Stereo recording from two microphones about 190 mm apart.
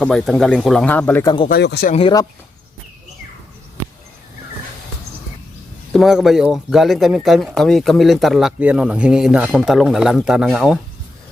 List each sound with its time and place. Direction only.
0.0 s speech: 5° left (ahead or behind)
1.5 s speech: 55° left (ahead or behind)
1.9 s speech: 30° left (ahead or behind)
5.9 s speech: centre (ahead or behind)